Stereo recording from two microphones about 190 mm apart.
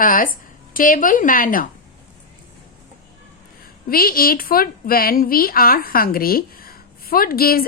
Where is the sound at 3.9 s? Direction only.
50° left (ahead or behind).